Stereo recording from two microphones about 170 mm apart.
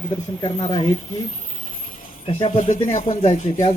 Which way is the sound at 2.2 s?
40° left (ahead or behind).